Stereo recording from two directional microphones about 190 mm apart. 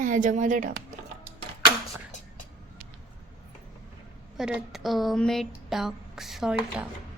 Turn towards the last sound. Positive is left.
turn(degrees=-5)  # may be behind; listen again after turning